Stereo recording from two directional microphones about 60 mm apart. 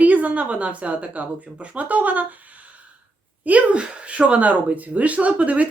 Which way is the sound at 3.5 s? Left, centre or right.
Right.